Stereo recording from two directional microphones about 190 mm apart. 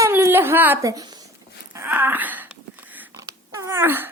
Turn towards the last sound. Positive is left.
turn(degrees=-10)  # may be behind; listen again after turning